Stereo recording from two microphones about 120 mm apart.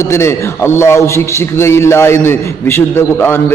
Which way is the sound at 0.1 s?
20° left (ahead or behind).